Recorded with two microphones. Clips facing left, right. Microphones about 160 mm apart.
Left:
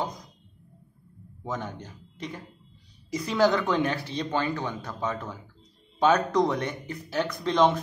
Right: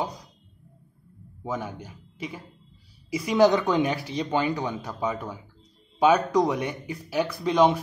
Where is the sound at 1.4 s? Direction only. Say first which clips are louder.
Right 2 dB; 10° right (ahead or behind).